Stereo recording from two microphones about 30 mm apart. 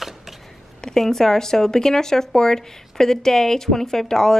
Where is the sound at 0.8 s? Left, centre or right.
Centre.